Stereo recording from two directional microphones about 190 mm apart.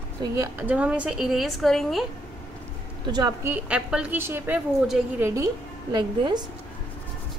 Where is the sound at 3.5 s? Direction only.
5° right (ahead or behind).